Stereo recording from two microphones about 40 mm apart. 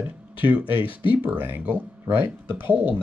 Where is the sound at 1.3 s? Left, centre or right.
Right.